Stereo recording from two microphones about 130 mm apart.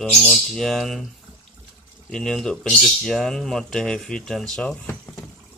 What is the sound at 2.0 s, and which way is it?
Speech, 5° left (ahead or behind).